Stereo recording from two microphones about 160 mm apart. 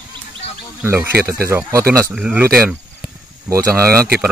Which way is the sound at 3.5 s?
15° right (ahead or behind).